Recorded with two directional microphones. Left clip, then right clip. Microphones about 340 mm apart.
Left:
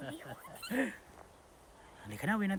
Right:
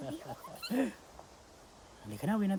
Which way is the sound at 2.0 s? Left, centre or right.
Centre.